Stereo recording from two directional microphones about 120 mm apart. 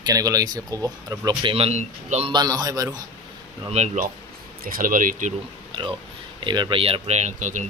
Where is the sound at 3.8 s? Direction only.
70° right (ahead or behind).